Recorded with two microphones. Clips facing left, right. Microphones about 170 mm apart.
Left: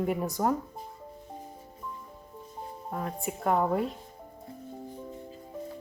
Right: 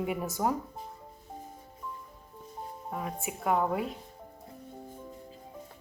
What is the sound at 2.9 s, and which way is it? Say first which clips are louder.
Speech: left 2 dB; 5° right (ahead or behind).